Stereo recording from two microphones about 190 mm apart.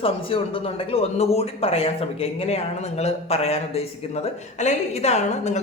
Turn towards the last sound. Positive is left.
turn(degrees=35)  # may be behind; listen again after turning